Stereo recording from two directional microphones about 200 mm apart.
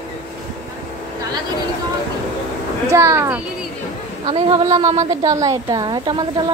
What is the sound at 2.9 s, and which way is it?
Speech, 15° right (ahead or behind).